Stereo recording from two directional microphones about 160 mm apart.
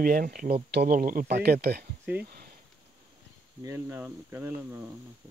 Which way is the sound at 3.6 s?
15° right (ahead or behind).